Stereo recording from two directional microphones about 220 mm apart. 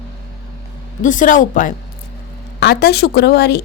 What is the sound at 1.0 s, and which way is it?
A woman's voice, 35° left (ahead or behind).